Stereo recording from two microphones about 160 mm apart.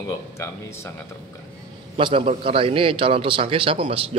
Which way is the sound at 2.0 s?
30° right (ahead or behind).